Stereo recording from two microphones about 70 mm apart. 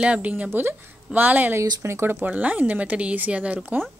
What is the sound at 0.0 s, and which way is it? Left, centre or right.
Speech, centre.